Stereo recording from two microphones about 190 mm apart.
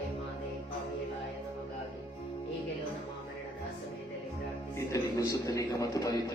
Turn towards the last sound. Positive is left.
turn(degrees=20)  # may be behind; listen again after turning